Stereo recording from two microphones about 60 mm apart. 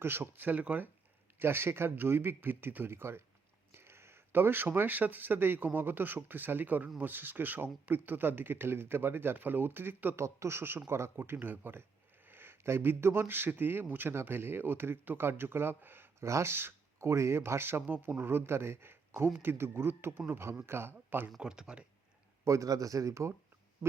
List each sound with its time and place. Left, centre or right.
0.0 s speech: right
1.4 s speech: right
10.2 s speech: right
10.6 s speech: right
16.2 s speech: right
17.0 s speech: right
18.2 s speech: right
21.3 s speech: centre
22.4 s speech: right